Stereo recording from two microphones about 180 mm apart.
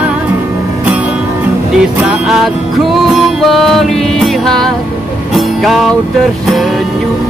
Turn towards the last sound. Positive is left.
turn(degrees=0)  # may be behind; listen again after turning